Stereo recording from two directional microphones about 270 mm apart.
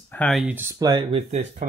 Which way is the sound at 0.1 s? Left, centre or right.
Centre.